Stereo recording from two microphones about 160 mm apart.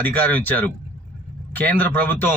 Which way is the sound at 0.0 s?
10° left (ahead or behind).